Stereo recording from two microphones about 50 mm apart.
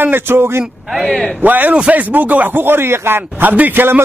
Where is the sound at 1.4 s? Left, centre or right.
Right.